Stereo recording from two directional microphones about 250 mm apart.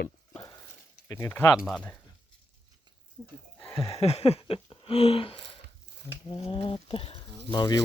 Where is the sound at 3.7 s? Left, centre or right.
Left.